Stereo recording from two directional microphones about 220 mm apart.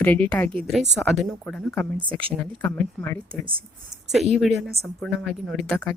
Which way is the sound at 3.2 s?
25° right (ahead or behind).